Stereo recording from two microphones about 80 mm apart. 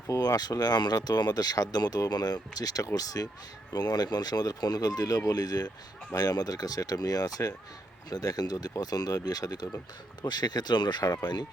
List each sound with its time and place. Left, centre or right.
0.1 s speech: left